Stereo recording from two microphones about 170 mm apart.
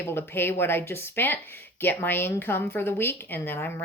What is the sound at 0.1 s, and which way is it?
A woman's voice, 15° left (ahead or behind).